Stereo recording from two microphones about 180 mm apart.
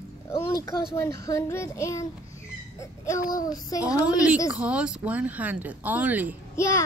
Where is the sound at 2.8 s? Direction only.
15° left (ahead or behind).